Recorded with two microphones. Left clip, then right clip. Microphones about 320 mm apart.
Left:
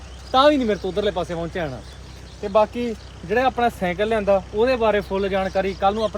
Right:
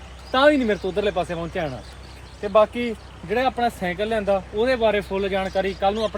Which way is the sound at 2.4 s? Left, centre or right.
Right.